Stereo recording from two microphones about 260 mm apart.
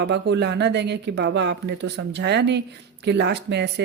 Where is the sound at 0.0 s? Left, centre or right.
Right.